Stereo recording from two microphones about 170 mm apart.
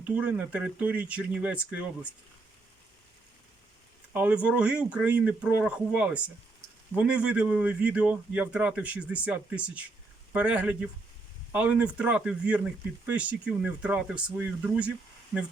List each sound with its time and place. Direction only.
0.0 s speech: 10° right (ahead or behind)
4.1 s speech: 10° right (ahead or behind)